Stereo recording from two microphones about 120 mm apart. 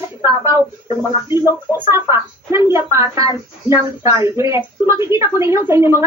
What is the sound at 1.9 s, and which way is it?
Speech, 20° right (ahead or behind).